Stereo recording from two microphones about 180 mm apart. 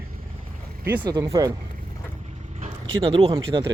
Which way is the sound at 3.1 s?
30° right (ahead or behind).